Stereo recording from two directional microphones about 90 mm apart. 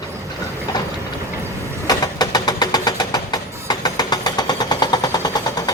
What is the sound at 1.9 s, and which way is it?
Vehicle, 45° left (ahead or behind).